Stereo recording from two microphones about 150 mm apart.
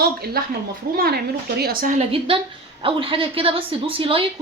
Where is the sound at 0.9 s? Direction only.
75° right (ahead or behind).